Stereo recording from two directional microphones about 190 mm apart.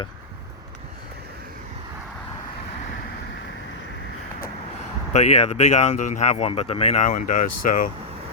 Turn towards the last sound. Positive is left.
turn(degrees=45)  # may be behind; listen again after turning